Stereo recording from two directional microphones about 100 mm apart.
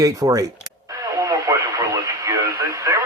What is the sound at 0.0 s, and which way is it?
Speech, 35° right (ahead or behind).